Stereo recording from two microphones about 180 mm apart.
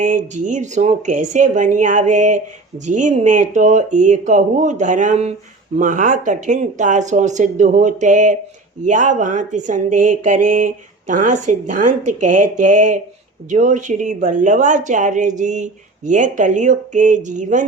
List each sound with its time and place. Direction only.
0.0 s speech: 45° right (ahead or behind)